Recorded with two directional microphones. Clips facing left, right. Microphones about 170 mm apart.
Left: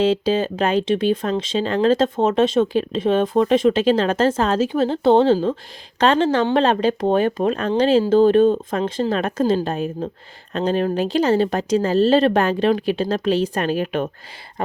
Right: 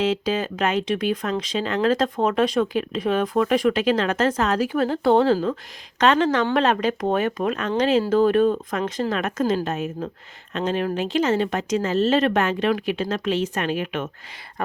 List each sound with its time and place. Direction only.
0.0 s speech: 30° left (ahead or behind)